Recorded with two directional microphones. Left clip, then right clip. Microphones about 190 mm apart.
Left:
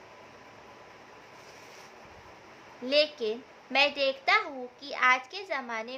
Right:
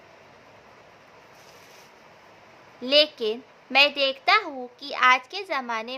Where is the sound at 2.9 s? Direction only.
30° right (ahead or behind).